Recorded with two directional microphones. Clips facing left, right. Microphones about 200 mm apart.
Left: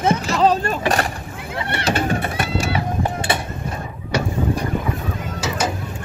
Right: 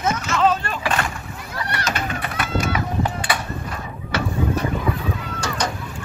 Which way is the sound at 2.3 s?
25° left (ahead or behind).